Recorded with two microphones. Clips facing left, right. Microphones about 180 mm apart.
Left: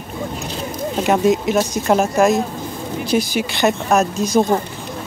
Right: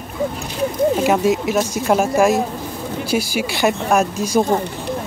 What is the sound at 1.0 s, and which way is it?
Speech, 5° right (ahead or behind).